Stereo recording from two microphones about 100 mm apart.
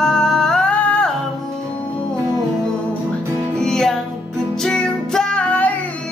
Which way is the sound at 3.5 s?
5° left (ahead or behind).